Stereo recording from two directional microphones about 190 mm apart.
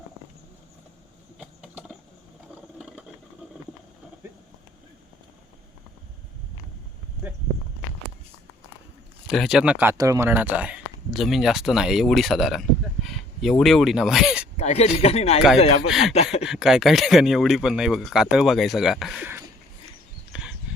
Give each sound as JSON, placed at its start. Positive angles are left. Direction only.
{"t": 1.4, "sound": "a sound", "side_deg": -5}
{"t": 9.2, "sound": "speech", "side_deg": 0}
{"t": 14.5, "sound": "speech", "side_deg": 35}
{"t": 15.9, "sound": "speech", "side_deg": 0}
{"t": 16.1, "sound": "speech", "side_deg": 35}
{"t": 16.4, "sound": "speech", "side_deg": 0}
{"t": 20.3, "sound": "dog", "side_deg": -5}